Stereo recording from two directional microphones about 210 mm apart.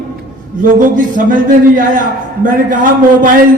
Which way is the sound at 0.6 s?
40° right (ahead or behind).